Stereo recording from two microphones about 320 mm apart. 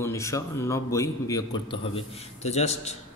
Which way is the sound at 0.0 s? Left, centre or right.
Centre.